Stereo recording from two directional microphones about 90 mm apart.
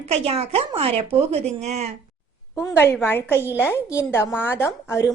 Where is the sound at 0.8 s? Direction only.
90° right.